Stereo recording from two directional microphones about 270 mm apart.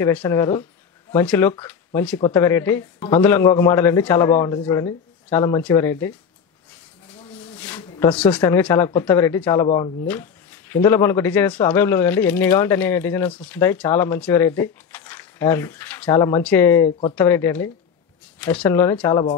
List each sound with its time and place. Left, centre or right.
0.0 s speech: centre
7.6 s a sound: centre
8.4 s speech: centre
10.0 s speech: centre